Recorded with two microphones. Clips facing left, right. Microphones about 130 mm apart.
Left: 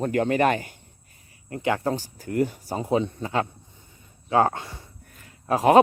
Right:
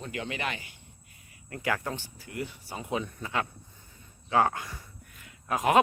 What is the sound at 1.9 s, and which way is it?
Speech, 40° left (ahead or behind).